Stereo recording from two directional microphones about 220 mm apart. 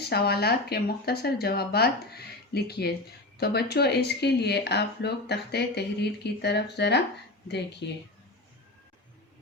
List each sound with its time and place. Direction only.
0.1 s speech: 45° left (ahead or behind)